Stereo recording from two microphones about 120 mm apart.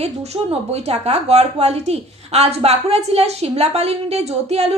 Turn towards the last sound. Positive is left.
turn(degrees=-60)  # may be behind; listen again after turning